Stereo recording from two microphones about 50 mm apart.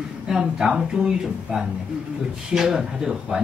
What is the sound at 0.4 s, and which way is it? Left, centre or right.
Speech, centre.